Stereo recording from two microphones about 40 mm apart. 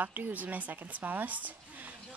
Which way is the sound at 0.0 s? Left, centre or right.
Right.